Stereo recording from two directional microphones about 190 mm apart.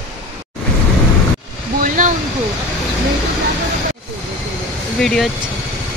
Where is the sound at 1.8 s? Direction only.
45° right (ahead or behind).